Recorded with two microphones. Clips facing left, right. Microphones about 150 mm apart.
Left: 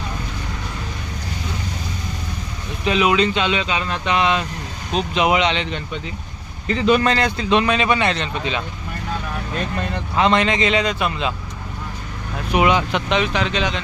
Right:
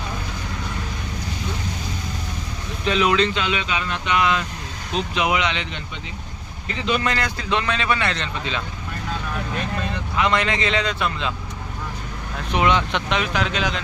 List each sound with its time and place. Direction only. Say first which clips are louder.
2.8 s speech: left 2 dB; 10° left (ahead or behind)
3.3 s speech: left 3 dB; 25° left (ahead or behind)
6.8 s speech: left 6 dB; 45° left (ahead or behind)
7.1 s speech: left 6 dB; 25° left (ahead or behind)
10.2 s speech: left 4 dB; 25° left (ahead or behind)
12.5 s speech: left 3 dB; 10° left (ahead or behind)
13.1 s speech: left 3 dB; centre (ahead or behind)